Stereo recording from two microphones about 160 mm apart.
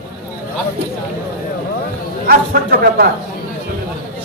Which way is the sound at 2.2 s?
70° right (ahead or behind).